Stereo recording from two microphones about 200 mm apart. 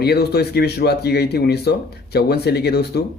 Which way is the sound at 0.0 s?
55° left (ahead or behind).